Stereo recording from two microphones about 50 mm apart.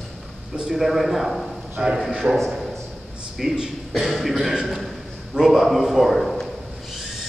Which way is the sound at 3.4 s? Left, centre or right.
Centre.